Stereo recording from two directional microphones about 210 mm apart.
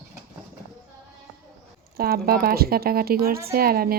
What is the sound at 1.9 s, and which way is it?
Speech, 45° right (ahead or behind).